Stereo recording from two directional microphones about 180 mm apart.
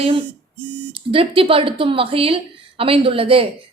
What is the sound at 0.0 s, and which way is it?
A woman's voice, 30° right (ahead or behind).